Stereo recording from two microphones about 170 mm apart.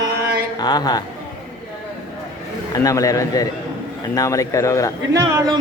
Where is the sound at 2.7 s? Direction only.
20° left (ahead or behind).